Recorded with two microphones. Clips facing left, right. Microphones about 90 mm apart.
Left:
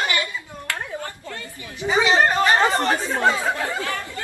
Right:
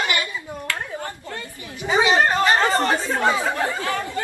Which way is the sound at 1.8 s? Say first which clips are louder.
Even; 20° right (ahead or behind).